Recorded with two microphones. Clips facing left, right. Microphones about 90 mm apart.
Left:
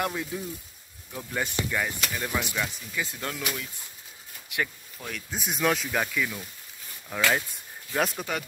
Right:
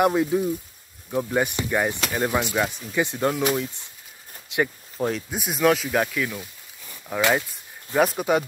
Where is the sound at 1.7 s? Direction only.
30° right (ahead or behind).